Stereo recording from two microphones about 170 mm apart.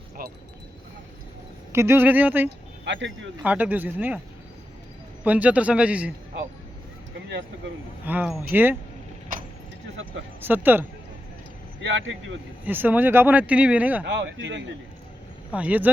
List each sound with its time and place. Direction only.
0.2 s a sound: 55° right (ahead or behind)
1.7 s speech: 15° right (ahead or behind)
2.8 s speech: 90° right
3.4 s speech: 10° right (ahead or behind)
5.2 s speech: 10° right (ahead or behind)
8.0 s speech: 10° right (ahead or behind)
9.3 s vehicle: 55° right (ahead or behind)
10.4 s speech: 10° right (ahead or behind)
11.8 s speech: 90° right
12.6 s speech: 10° right (ahead or behind)
14.0 s speech: 90° right
15.5 s speech: 10° right (ahead or behind)